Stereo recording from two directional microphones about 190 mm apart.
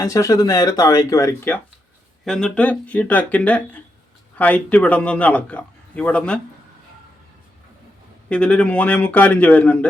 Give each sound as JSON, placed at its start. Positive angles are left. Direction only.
{"t": 0.0, "sound": "a man's voice", "side_deg": 15}
{"t": 8.3, "sound": "a man's voice", "side_deg": 5}